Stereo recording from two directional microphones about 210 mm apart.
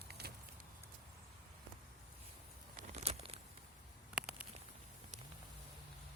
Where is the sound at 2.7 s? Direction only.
30° right (ahead or behind).